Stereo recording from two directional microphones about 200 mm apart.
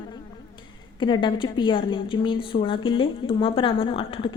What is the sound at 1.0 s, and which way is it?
A woman's voice, 25° left (ahead or behind).